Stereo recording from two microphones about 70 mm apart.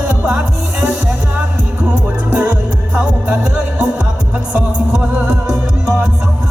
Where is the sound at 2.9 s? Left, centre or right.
Centre.